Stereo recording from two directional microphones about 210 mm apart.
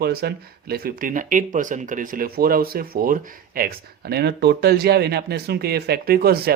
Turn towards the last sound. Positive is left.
turn(degrees=-45)  # may be behind; listen again after turning